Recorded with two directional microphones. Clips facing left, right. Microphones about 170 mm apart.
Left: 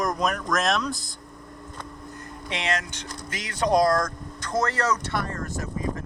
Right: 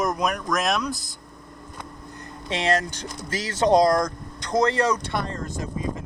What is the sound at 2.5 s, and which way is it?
Speech, 35° right (ahead or behind).